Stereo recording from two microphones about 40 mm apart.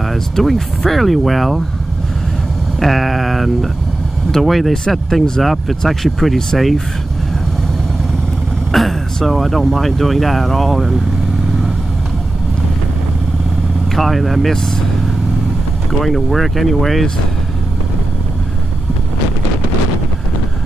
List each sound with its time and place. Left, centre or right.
0.1 s speech: centre
2.8 s speech: centre
8.7 s speech: centre
13.9 s speech: centre
16.0 s speech: centre